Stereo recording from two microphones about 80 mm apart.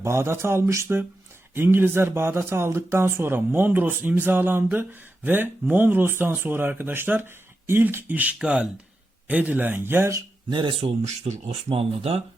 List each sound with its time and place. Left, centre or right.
0.0 s speech: right
10.5 s speech: right